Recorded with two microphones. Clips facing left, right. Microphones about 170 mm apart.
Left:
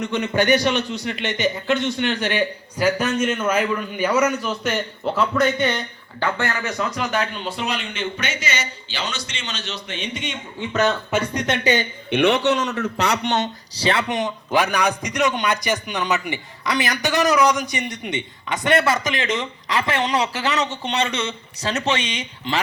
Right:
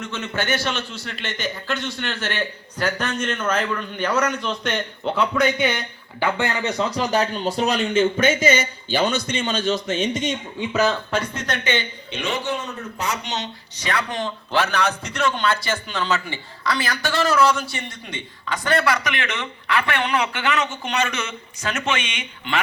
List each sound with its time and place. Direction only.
0.0 s a man's voice: 15° left (ahead or behind); by 5.8 s centre (ahead or behind)
6.1 s speech: 15° right (ahead or behind); by 10.3 s 40° right (ahead or behind)
10.7 s speech: centre (ahead or behind)
11.6 s speech: 40° left (ahead or behind)
12.1 s speech: 65° left (ahead or behind)
13.7 s a man's voice: 25° left (ahead or behind)